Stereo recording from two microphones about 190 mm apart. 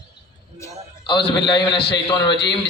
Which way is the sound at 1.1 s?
60° left (ahead or behind).